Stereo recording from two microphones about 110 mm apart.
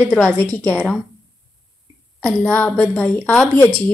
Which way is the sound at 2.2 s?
15° left (ahead or behind).